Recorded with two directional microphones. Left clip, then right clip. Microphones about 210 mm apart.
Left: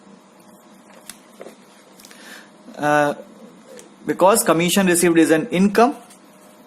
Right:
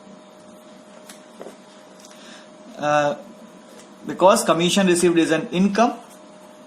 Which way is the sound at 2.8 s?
45° left (ahead or behind).